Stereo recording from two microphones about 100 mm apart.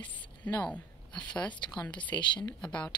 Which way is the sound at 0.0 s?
15° left (ahead or behind).